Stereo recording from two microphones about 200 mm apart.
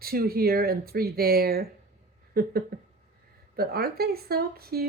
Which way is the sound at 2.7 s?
50° right (ahead or behind).